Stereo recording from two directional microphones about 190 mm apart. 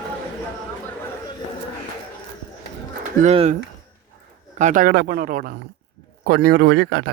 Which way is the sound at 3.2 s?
35° right (ahead or behind).